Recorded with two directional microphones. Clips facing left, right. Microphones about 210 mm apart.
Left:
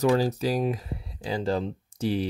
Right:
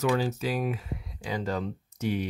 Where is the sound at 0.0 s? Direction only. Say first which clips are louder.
Left 4 dB; 35° left (ahead or behind).